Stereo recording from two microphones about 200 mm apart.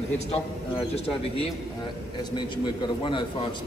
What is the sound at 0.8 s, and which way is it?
Speech, 30° left (ahead or behind).